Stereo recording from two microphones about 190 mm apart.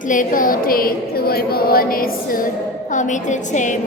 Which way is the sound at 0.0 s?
45° left (ahead or behind).